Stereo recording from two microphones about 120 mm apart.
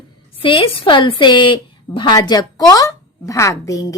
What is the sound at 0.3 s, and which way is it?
A woman's voice, 45° left (ahead or behind).